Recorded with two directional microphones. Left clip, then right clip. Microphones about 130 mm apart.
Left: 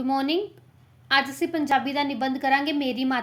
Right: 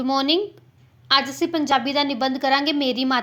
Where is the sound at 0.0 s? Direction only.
15° right (ahead or behind).